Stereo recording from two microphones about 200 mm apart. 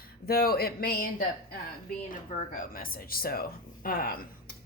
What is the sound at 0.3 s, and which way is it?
Speech, 50° left (ahead or behind).